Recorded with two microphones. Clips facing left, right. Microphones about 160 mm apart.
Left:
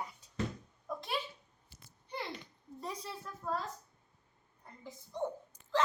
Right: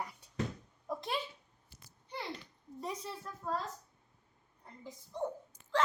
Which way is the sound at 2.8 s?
20° right (ahead or behind).